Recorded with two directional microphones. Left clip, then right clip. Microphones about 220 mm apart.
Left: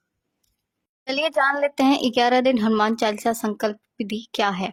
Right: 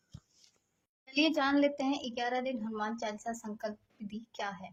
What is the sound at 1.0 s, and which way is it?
A woman's voice, 45° left (ahead or behind).